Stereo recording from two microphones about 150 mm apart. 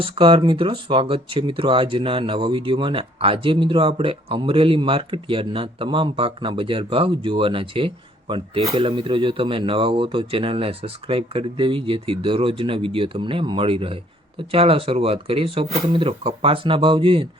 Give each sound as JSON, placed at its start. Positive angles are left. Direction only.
{"t": 0.0, "sound": "speech", "side_deg": -35}